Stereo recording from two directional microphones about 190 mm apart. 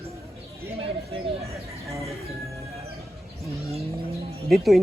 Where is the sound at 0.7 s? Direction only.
30° right (ahead or behind).